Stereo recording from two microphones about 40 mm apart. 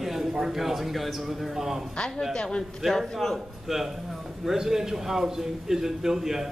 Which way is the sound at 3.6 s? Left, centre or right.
Centre.